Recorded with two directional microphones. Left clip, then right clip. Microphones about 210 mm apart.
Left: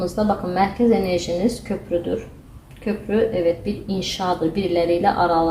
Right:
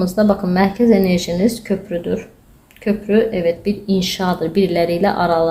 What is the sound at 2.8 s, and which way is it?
Speech, 45° right (ahead or behind).